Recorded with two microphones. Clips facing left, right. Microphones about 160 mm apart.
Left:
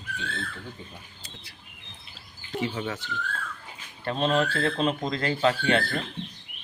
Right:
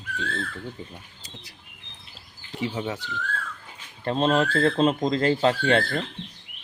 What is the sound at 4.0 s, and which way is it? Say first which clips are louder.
Speech: right 3 dB; 35° right (ahead or behind).